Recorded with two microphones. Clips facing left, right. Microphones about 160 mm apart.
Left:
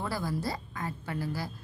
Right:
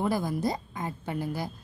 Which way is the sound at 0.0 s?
20° right (ahead or behind).